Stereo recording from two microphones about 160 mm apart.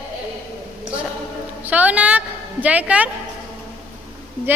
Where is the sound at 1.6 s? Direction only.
10° right (ahead or behind).